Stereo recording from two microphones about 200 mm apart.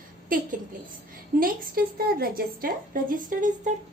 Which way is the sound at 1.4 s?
50° right (ahead or behind).